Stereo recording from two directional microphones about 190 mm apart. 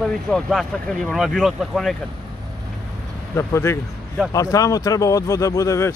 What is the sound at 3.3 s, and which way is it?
Speech, 15° left (ahead or behind).